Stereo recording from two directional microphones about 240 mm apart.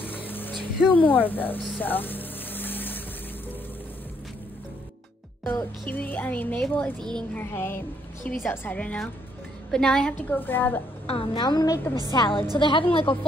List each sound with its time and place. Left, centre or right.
0.2 s vehicle: centre
0.8 s speech: centre
5.4 s speech: centre
11.1 s a woman's voice: left